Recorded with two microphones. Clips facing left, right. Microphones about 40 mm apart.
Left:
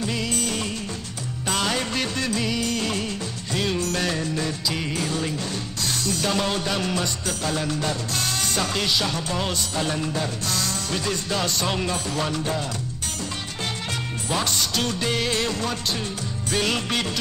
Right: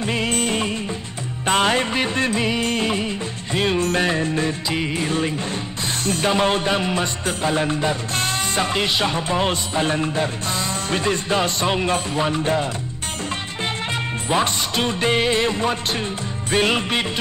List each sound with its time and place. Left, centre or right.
0.0 s music of bollywood: right
2.9 s music: right
14.3 s music: right